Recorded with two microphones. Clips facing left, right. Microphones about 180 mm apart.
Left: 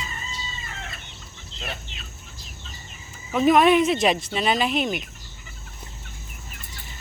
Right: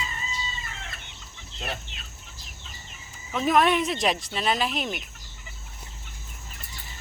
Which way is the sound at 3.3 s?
5° left (ahead or behind).